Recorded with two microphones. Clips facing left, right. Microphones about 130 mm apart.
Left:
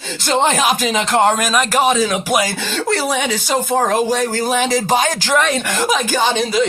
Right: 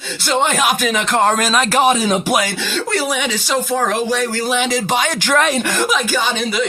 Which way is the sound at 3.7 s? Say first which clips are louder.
Left 3 dB; 35° left (ahead or behind).